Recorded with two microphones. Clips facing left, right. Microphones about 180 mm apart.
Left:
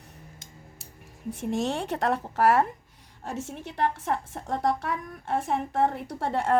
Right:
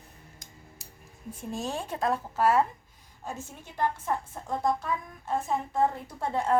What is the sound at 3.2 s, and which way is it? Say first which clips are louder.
A woman's voice: left 5 dB; 85° left.